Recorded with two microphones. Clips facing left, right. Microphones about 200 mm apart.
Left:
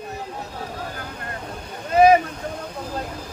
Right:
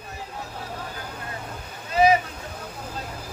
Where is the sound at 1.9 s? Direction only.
50° left (ahead or behind).